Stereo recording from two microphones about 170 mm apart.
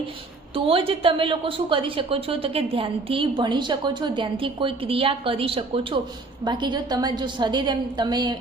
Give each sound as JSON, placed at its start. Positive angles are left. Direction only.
{"t": 0.5, "sound": "a woman's voice", "side_deg": -30}